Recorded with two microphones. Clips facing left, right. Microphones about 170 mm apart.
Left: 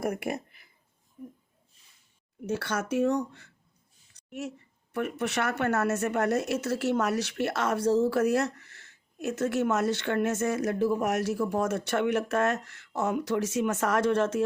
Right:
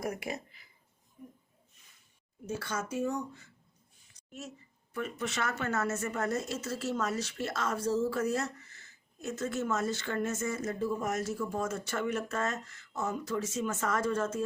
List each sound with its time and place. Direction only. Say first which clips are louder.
0.0 s speech: left 6 dB; 55° left (ahead or behind)
2.5 s speech: left 6 dB; 75° left (ahead or behind)